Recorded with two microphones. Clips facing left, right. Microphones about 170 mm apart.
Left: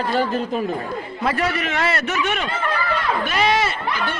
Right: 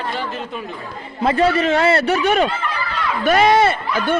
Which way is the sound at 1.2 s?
25° right (ahead or behind).